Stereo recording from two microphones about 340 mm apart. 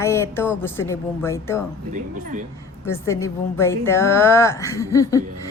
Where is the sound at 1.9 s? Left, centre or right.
Right.